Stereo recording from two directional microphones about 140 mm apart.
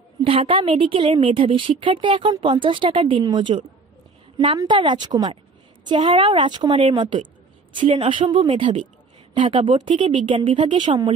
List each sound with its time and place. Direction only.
0.2 s a woman's voice: 40° right (ahead or behind)